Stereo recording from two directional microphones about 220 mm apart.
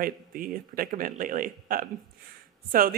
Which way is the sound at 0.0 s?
40° right (ahead or behind).